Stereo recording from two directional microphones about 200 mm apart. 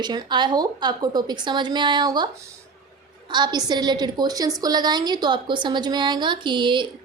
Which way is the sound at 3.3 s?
20° right (ahead or behind).